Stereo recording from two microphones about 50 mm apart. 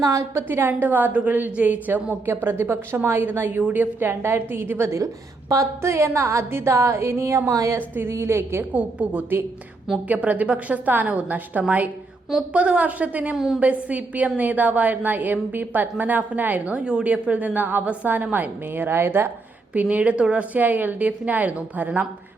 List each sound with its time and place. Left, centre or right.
0.3 s a woman's voice: right
2.2 s a woman's voice: right
4.1 s a woman's voice: right
5.5 s a sound: right
8.0 s a woman's voice: right
8.7 s a woman's voice: right
13.3 s a woman's voice: centre
13.6 s a woman's voice: right
18.9 s a woman's voice: right
19.7 s a woman's voice: right